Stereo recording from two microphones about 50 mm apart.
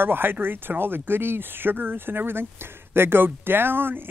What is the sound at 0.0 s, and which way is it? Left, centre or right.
Speech, right.